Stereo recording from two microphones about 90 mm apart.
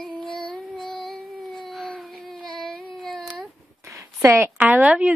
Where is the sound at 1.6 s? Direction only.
Centre (ahead or behind).